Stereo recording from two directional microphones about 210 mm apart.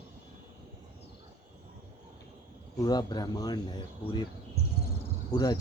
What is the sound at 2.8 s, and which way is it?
Speech, 20° left (ahead or behind).